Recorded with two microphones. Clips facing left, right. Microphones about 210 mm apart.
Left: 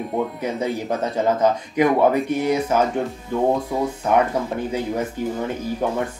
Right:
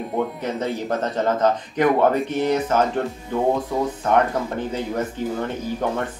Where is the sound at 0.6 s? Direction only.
10° left (ahead or behind).